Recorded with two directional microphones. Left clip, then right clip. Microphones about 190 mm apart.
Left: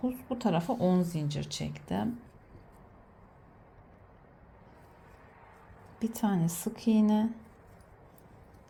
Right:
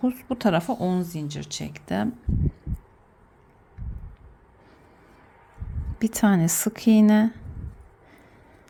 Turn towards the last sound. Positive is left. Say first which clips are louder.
# right 9 dB
turn(degrees=-25)  # may be behind; listen again after turning